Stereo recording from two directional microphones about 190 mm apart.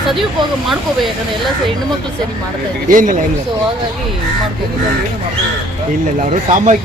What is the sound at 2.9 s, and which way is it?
Speech, 45° right (ahead or behind).